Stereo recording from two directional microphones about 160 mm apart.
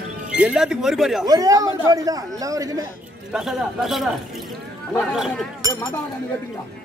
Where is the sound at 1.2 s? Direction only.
25° right (ahead or behind).